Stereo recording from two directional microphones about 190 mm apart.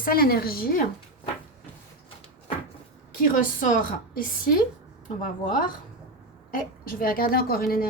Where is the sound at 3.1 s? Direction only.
45° left (ahead or behind).